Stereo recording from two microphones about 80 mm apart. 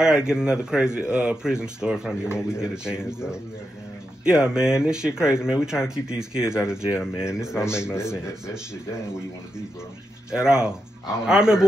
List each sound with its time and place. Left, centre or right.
0.0 s a man's voice: centre
7.2 s speech: left
7.4 s a man's voice: centre
7.9 s speech: left
10.3 s a man's voice: centre